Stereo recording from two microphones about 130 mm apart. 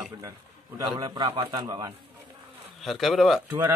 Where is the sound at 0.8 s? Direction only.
35° right (ahead or behind).